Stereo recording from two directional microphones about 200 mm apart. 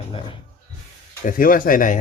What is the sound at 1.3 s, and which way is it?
Speech, 45° left (ahead or behind).